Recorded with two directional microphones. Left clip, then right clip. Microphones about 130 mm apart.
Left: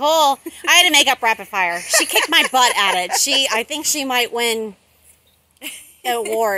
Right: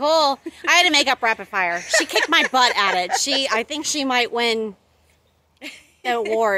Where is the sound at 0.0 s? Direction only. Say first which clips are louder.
Left 3 dB; 15° right (ahead or behind).